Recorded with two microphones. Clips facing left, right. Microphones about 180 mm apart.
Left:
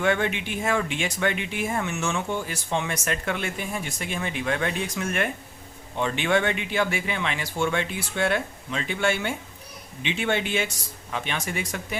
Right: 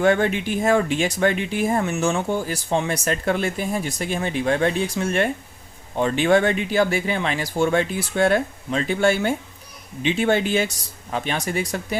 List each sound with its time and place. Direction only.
0.0 s speech: 40° right (ahead or behind)